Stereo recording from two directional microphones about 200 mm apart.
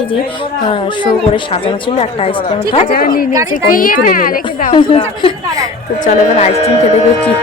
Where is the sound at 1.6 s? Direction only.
30° left (ahead or behind).